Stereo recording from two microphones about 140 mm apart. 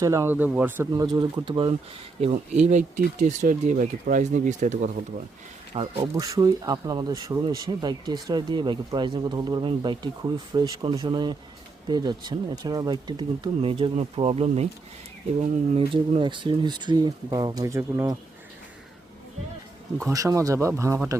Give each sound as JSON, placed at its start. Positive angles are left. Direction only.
{"t": 0.0, "sound": "speech", "side_deg": -20}
{"t": 0.9, "sound": "speech", "side_deg": -30}
{"t": 2.2, "sound": "speech", "side_deg": -55}
{"t": 5.7, "sound": "speech", "side_deg": -45}
{"t": 6.1, "sound": "speech", "side_deg": -25}
{"t": 15.9, "sound": "speech", "side_deg": -35}
{"t": 20.1, "sound": "speech", "side_deg": -25}